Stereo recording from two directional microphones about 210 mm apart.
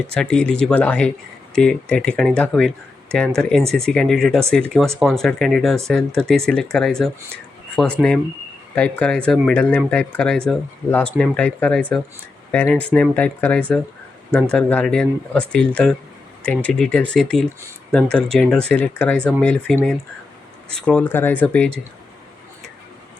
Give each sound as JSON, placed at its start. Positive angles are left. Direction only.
{"t": 0.1, "sound": "speech", "side_deg": 5}